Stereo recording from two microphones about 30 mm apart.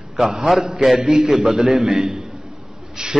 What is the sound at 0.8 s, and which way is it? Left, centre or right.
Speech, centre.